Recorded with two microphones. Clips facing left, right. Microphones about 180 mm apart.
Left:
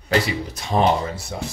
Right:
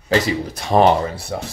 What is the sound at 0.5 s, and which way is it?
Speech, 65° right (ahead or behind).